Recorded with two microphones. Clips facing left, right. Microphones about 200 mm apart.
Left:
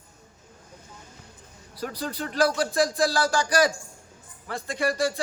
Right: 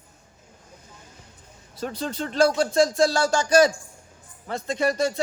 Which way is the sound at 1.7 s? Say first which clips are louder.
Right 2 dB; 25° right (ahead or behind).